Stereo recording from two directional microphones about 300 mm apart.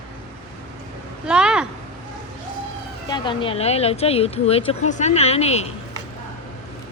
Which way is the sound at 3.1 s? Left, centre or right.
Centre.